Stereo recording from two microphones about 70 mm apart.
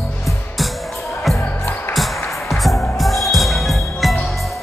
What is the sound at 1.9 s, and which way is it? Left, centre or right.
Music, centre.